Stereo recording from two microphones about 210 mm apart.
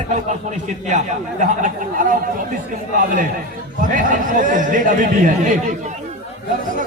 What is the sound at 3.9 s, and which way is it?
Speech, 40° right (ahead or behind).